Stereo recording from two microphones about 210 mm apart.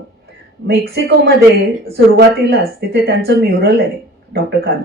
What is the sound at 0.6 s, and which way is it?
Speech, 50° right (ahead or behind).